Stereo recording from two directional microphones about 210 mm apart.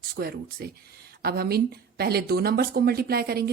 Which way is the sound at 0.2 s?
45° right (ahead or behind).